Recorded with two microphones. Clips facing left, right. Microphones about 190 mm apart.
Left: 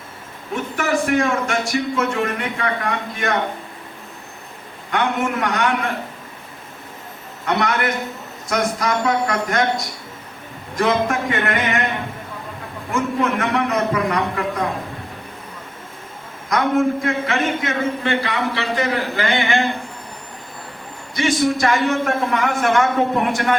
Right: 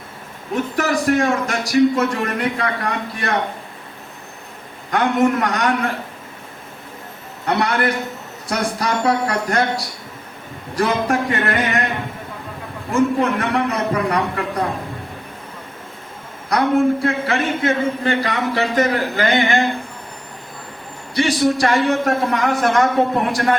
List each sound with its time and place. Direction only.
0.5 s a man's voice: 35° right (ahead or behind)
4.9 s a man's voice: 35° right (ahead or behind)
7.4 s a man's voice: 35° right (ahead or behind)
12.9 s a man's voice: 35° right (ahead or behind)
16.5 s a man's voice: 35° right (ahead or behind)
21.1 s a man's voice: 35° right (ahead or behind)